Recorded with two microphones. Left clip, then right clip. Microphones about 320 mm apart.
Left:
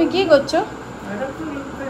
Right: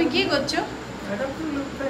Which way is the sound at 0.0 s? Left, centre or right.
Centre.